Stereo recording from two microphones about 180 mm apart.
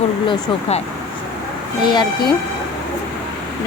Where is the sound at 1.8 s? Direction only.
25° left (ahead or behind).